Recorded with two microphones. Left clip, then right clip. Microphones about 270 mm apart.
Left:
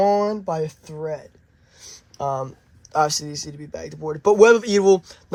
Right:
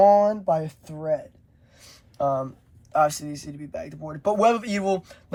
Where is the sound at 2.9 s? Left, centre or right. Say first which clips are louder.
Left 1 dB; left.